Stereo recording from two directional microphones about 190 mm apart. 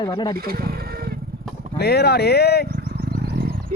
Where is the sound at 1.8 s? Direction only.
60° left (ahead or behind).